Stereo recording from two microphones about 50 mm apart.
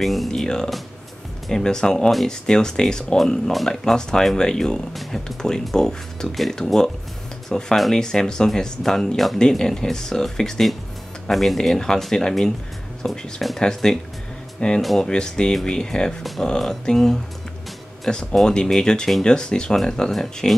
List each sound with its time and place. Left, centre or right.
0.0 s speech: centre
0.3 s speech: centre
18.3 s speech: centre